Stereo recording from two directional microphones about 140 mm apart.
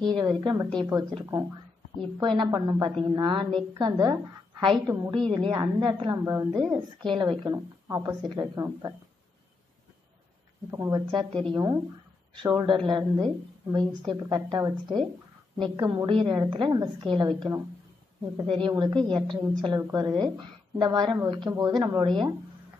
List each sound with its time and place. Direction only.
0.0 s a woman's voice: 30° right (ahead or behind)
2.1 s a woman's voice: 35° right (ahead or behind)
5.1 s a woman's voice: 35° right (ahead or behind)
6.1 s a woman's voice: 25° right (ahead or behind)
10.7 s a woman's voice: 20° right (ahead or behind)
11.1 s a woman's voice: 40° right (ahead or behind)